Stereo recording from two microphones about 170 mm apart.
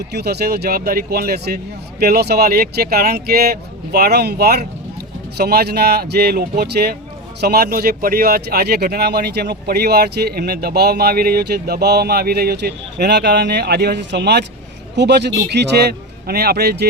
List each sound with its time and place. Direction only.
0.1 s speech: 70° right (ahead or behind)